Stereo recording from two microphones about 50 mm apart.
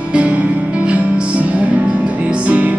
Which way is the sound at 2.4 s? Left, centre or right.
Right.